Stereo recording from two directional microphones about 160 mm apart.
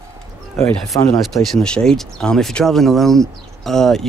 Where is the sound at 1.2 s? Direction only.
Centre (ahead or behind).